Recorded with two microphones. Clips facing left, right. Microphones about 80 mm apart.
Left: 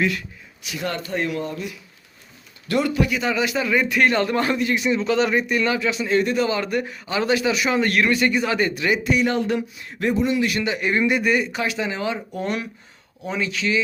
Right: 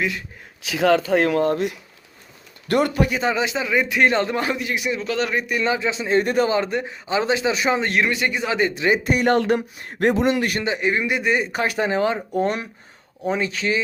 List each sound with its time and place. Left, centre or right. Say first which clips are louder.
1.1 s speech: right 7 dB; right; by 5.0 s centre
5.0 s speech: left 3 dB; centre
5.5 s speech: even; right
6.2 s speech: right 2 dB; right
6.5 s speech: right 1 dB; right
9.0 s speech: right 3 dB; right
10.0 s speech: right 3 dB; right
10.3 s speech: left 1 dB; right
10.6 s speech: even; right
10.8 s speech: left 2 dB; centre
11.2 s speech: left 1 dB; right
11.4 s speech: right 3 dB; right